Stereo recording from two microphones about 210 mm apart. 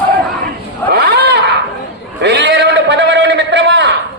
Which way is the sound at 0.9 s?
50° right (ahead or behind).